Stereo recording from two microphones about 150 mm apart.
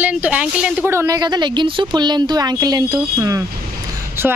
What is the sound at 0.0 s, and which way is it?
A woman's voice, 10° right (ahead or behind).